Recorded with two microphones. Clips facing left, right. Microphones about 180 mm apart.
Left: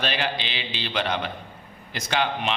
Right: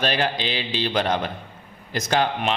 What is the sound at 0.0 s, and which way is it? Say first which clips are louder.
A man's voice: right 4 dB; 45° right (ahead or behind).